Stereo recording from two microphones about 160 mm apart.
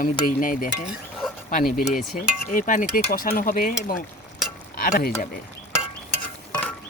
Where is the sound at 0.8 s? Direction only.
Centre (ahead or behind).